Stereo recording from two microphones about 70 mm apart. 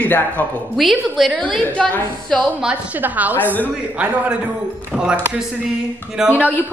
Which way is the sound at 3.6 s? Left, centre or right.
Centre.